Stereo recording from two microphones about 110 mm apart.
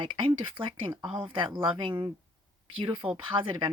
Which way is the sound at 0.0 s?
50° right (ahead or behind).